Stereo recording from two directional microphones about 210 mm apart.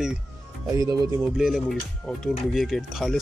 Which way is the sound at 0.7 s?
15° right (ahead or behind).